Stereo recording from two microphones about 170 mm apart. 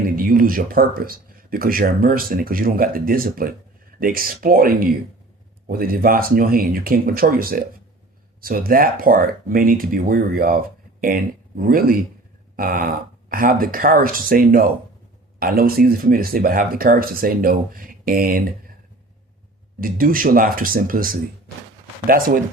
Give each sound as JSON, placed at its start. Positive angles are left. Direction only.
{"t": 0.2, "sound": "speech", "side_deg": -55}
{"t": 19.8, "sound": "speech", "side_deg": -55}